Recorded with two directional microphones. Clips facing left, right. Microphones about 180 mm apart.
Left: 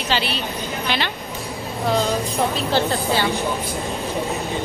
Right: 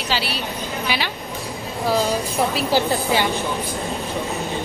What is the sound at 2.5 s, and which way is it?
Speech, 15° right (ahead or behind).